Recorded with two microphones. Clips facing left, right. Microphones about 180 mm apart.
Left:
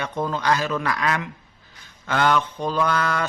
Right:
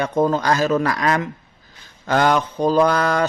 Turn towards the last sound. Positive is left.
turn(degrees=-40)  # may be behind; listen again after turning